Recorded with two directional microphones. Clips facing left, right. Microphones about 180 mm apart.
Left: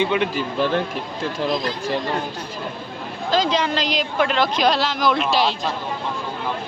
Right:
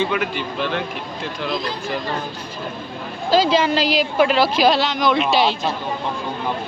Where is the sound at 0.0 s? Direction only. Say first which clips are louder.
Left 1 dB; 20° left (ahead or behind).